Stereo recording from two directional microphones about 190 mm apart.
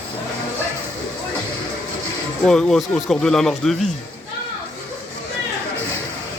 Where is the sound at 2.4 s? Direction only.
5° left (ahead or behind).